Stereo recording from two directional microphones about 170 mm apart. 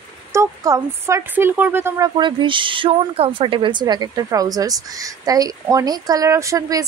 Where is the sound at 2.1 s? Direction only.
30° right (ahead or behind).